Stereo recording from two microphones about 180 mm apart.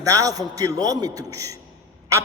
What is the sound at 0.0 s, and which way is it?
A man's voice, 20° right (ahead or behind).